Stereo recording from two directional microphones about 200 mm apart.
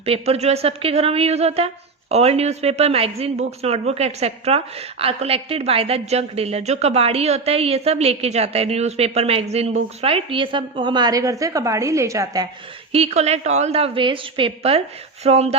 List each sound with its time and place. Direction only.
0.0 s a woman's voice: 30° right (ahead or behind)
12.9 s a woman's voice: 30° right (ahead or behind)